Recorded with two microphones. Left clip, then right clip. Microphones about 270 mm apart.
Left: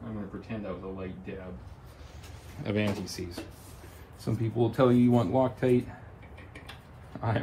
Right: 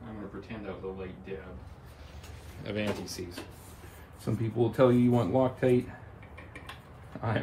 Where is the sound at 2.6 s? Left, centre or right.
Left.